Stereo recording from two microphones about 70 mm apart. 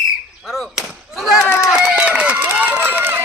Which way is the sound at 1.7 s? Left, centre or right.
Centre.